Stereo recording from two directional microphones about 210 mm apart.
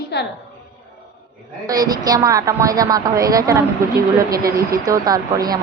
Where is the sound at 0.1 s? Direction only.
55° left (ahead or behind).